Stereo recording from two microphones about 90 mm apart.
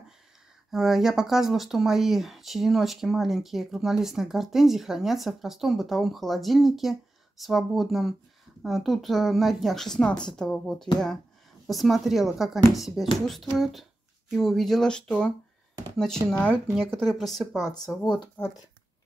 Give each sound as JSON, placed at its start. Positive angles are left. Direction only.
{"t": 0.7, "sound": "speech", "side_deg": -5}
{"t": 17.6, "sound": "speech", "side_deg": 45}